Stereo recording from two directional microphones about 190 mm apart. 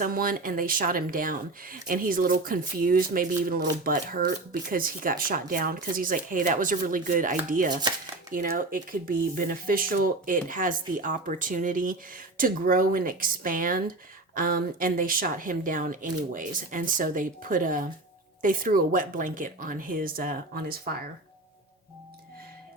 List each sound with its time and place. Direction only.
0.0 s speech: 50° right (ahead or behind)